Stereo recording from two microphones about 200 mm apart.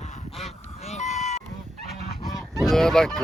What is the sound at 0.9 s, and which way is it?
Goat, 35° left (ahead or behind).